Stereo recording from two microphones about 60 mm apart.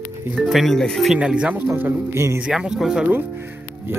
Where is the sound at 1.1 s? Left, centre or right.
Centre.